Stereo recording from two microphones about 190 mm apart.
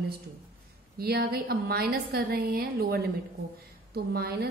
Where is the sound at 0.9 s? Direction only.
55° right (ahead or behind).